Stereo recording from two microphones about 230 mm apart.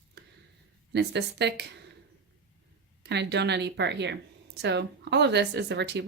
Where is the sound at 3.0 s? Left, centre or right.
Right.